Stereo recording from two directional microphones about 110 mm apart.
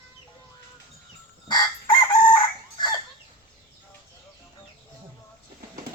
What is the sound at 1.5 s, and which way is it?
Crowing, 45° left (ahead or behind).